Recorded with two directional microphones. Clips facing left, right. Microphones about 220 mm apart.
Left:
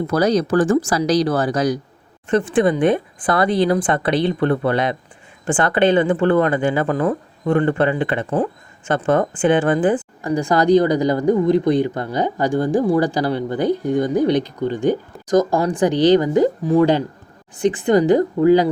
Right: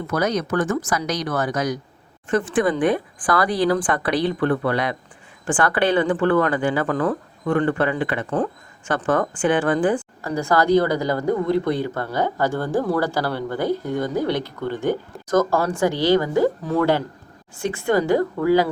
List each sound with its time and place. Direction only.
0.1 s a woman's voice: 35° left (ahead or behind)